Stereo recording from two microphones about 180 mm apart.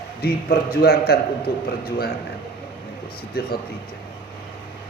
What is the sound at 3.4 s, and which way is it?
Speech, 55° left (ahead or behind).